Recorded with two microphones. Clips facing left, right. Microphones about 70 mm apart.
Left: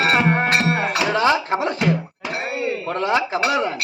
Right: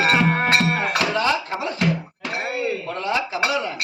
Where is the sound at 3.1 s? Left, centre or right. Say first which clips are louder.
Left 2 dB; left.